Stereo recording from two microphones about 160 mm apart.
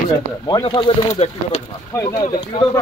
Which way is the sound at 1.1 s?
45° left (ahead or behind).